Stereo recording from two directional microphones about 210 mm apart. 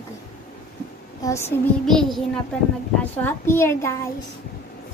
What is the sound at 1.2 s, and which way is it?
Speech, 15° left (ahead or behind).